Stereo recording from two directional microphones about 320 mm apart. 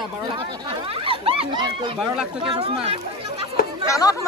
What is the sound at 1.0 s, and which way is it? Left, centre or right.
Speech, centre.